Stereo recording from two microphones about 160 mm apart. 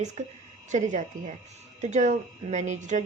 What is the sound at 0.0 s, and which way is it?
Speech, 45° right (ahead or behind).